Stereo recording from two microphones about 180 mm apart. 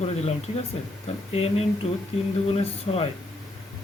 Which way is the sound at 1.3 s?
35° left (ahead or behind).